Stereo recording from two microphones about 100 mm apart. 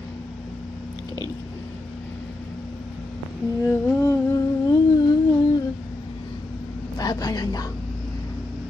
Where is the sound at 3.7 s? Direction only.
35° left (ahead or behind).